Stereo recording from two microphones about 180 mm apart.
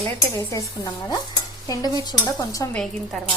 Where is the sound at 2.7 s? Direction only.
Centre (ahead or behind).